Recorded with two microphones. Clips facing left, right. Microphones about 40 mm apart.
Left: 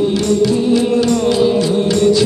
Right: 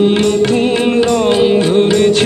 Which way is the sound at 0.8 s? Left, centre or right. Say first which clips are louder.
Right 2 dB; right.